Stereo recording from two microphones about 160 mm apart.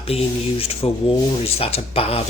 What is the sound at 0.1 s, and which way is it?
Speech, 40° left (ahead or behind).